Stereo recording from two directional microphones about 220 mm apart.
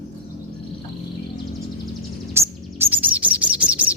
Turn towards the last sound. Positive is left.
turn(degrees=-5)  # may be behind; listen again after turning